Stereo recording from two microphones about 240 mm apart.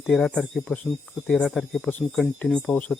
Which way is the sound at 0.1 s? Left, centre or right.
Centre.